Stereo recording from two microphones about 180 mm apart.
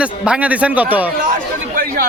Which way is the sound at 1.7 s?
55° right (ahead or behind).